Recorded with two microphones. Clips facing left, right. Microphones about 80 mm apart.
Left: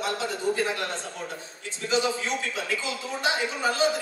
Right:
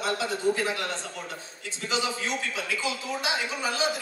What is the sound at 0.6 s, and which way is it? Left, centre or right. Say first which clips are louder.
A man's voice: left 1 dB; left.